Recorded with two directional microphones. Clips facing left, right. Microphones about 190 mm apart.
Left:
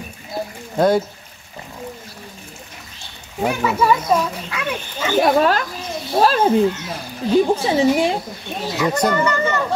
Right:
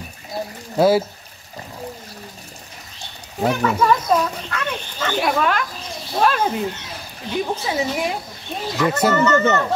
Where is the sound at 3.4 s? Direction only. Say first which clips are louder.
Even; 5° left (ahead or behind).